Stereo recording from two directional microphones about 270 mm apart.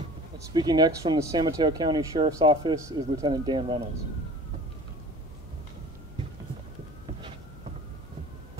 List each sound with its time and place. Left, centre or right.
0.5 s speech: centre